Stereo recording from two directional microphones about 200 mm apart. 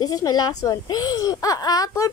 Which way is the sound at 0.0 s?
20° left (ahead or behind).